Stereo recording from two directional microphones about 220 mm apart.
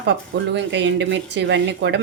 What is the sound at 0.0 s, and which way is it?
Speech, 55° right (ahead or behind).